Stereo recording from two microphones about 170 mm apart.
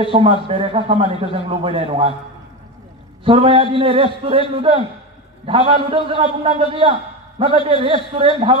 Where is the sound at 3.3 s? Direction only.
30° right (ahead or behind).